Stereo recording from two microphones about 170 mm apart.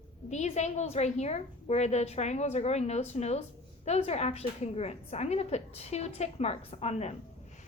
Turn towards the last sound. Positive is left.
turn(degrees=40)  # may be behind; listen again after turning